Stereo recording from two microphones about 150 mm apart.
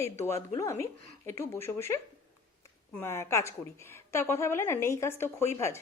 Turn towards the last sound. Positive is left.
turn(degrees=20)  # may be behind; listen again after turning